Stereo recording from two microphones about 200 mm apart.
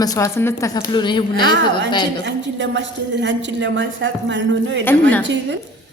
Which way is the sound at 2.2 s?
65° right (ahead or behind).